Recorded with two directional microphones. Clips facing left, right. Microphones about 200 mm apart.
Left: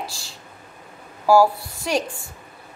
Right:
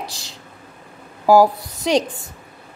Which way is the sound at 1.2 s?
20° right (ahead or behind).